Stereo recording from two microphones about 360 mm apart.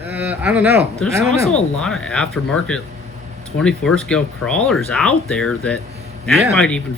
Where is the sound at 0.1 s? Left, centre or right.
Centre.